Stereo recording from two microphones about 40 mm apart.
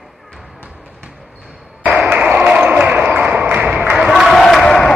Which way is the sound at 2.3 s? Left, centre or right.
Right.